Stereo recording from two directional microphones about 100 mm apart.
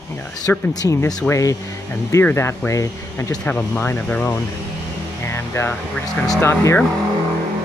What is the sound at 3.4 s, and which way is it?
Speech, 15° left (ahead or behind).